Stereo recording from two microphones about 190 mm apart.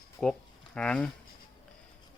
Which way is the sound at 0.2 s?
5° left (ahead or behind).